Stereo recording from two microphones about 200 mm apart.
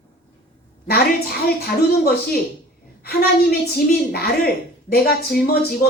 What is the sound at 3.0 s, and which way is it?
A woman's voice, 50° left (ahead or behind).